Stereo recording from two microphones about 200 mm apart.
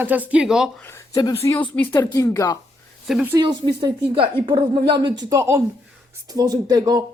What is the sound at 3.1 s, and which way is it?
Speech, centre (ahead or behind).